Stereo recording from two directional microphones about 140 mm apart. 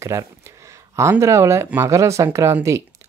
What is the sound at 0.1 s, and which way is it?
Speech, 20° right (ahead or behind).